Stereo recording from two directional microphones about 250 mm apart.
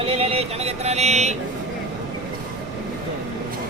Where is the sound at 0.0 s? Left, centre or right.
Right.